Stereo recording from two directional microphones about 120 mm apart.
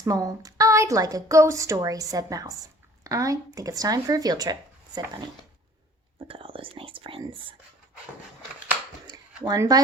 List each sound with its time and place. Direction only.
0.0 s a woman's voice: 30° right (ahead or behind)
6.1 s speech: 45° right (ahead or behind)
9.0 s a sound: 35° right (ahead or behind)